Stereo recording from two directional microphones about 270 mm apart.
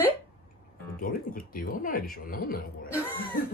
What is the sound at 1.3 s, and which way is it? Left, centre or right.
Speech, left.